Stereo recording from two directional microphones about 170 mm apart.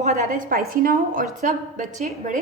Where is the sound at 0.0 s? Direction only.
50° right (ahead or behind).